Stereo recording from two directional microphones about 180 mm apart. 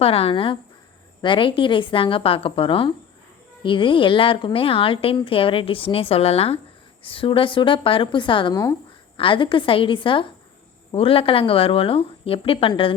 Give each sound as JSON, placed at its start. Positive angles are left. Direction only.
{"t": 0.0, "sound": "a woman's voice", "side_deg": 30}